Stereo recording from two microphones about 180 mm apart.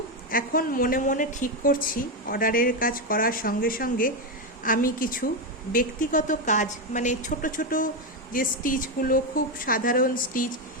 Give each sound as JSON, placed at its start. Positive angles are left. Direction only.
{"t": 0.3, "sound": "a woman's voice", "side_deg": 50}